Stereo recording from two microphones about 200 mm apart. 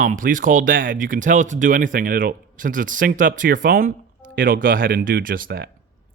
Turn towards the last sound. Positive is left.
turn(degrees=-50)  # may be behind; listen again after turning